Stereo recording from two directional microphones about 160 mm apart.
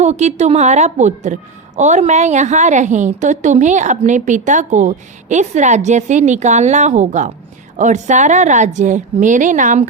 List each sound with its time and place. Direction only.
0.0 s a woman's voice: 45° right (ahead or behind)